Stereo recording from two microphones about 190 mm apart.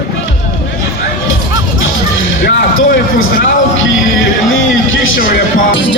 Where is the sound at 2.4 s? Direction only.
75° left (ahead or behind).